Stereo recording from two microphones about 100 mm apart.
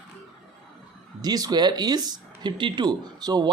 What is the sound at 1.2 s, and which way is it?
Speech, 40° right (ahead or behind).